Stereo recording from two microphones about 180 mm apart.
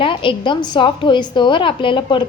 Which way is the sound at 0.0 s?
30° left (ahead or behind).